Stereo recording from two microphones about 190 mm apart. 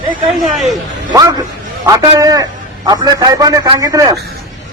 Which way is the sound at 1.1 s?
20° right (ahead or behind).